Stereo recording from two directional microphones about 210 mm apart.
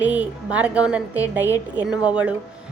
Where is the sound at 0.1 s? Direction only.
5° right (ahead or behind).